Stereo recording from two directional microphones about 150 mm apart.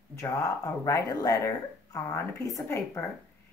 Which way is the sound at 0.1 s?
20° left (ahead or behind).